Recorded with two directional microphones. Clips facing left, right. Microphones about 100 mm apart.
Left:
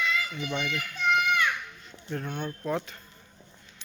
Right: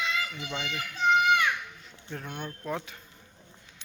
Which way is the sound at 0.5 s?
20° right (ahead or behind).